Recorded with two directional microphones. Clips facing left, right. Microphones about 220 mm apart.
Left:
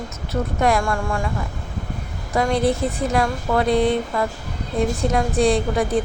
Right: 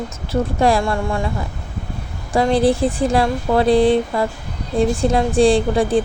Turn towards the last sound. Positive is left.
turn(degrees=-30)  # may be behind; listen again after turning